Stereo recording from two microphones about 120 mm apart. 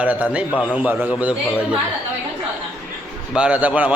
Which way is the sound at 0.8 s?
15° right (ahead or behind).